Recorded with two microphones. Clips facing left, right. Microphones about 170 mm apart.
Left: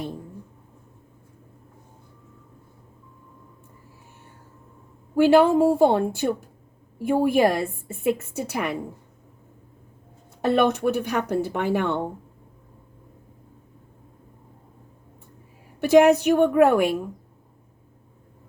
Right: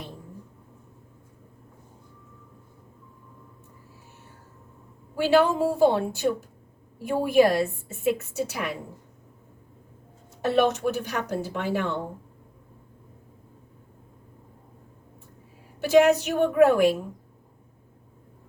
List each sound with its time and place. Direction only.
5.1 s a woman's voice: 55° left (ahead or behind)
10.4 s a woman's voice: 55° left (ahead or behind)
15.8 s a woman's voice: 55° left (ahead or behind)